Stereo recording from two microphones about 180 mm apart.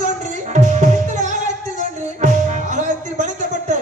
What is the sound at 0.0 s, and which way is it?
Music, 45° right (ahead or behind).